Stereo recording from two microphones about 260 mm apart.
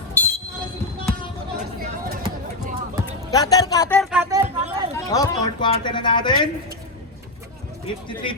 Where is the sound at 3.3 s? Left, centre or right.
Centre.